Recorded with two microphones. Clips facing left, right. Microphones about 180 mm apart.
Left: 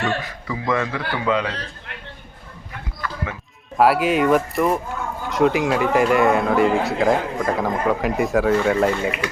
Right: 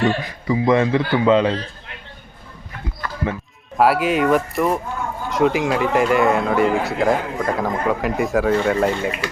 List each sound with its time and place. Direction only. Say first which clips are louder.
0.0 s a man's voice: right 4 dB; 20° right (ahead or behind)
3.8 s speech: even; centre (ahead or behind)